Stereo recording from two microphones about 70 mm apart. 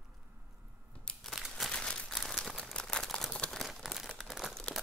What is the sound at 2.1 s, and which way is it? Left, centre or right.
Crumpling, centre.